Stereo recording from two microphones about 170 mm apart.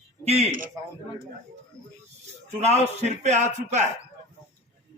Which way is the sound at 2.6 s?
40° right (ahead or behind).